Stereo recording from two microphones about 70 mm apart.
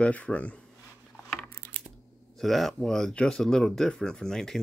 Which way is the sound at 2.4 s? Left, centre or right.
Centre.